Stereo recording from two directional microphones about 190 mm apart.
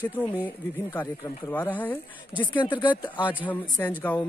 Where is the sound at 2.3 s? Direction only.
25° left (ahead or behind).